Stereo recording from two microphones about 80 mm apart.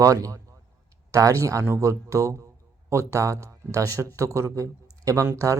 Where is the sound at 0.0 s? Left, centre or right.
Right.